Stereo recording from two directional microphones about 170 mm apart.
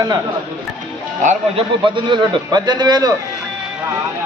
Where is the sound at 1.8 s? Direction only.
30° right (ahead or behind).